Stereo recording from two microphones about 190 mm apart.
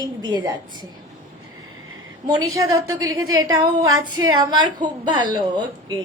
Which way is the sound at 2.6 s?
15° right (ahead or behind).